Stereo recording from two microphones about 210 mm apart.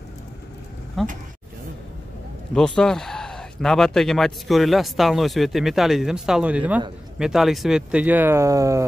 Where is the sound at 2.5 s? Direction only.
5° left (ahead or behind).